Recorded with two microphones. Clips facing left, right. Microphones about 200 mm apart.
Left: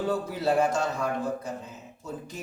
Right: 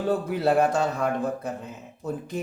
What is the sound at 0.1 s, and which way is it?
Speech, 55° right (ahead or behind).